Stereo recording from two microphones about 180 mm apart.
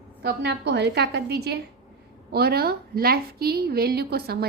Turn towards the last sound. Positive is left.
turn(degrees=-60)  # may be behind; listen again after turning